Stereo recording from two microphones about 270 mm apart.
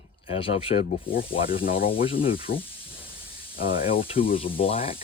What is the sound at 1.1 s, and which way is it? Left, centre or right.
Speech, left.